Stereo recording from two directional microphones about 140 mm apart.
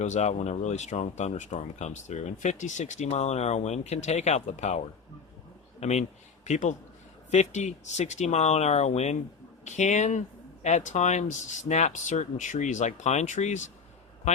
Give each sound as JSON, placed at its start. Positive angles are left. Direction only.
{"t": 0.0, "sound": "speech", "side_deg": 55}
{"t": 5.8, "sound": "a man's voice", "side_deg": 55}